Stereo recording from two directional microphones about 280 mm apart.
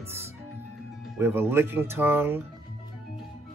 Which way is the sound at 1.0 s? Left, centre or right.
Centre.